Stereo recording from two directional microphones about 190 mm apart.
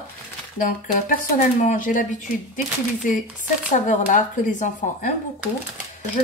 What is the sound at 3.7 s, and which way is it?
Speech, 40° left (ahead or behind).